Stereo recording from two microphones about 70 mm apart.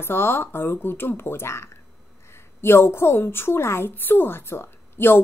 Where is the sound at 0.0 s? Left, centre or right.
Left.